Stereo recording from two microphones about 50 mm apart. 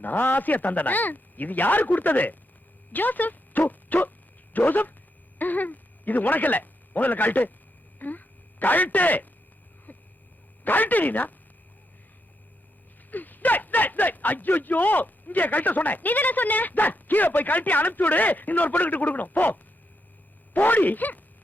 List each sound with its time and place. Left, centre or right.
0.0 s speech: left
10.6 s speech: left
13.1 s speech: left